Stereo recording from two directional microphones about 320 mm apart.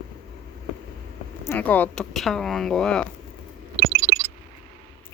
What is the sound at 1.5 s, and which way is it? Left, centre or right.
Speech, centre.